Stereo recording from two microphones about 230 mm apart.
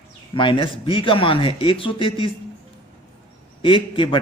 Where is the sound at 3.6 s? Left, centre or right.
Left.